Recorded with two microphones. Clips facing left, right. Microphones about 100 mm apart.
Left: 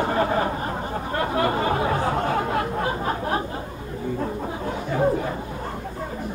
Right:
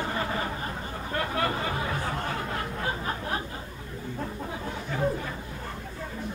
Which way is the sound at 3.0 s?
40° left (ahead or behind).